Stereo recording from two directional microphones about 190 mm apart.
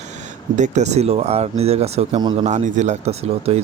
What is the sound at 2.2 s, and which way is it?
Speech, 20° right (ahead or behind).